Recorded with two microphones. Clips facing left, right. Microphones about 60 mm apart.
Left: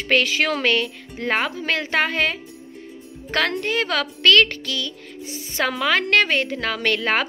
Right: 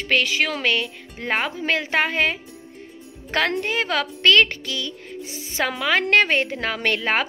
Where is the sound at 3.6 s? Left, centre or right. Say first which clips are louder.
Even; centre.